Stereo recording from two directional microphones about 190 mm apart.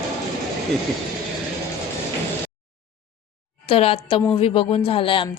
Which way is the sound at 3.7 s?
30° left (ahead or behind).